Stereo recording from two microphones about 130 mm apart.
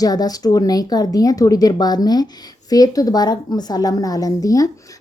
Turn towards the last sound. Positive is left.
turn(degrees=25)  # may be behind; listen again after turning